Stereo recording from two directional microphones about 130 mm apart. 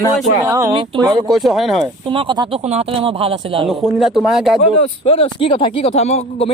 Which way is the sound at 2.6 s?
55° right (ahead or behind).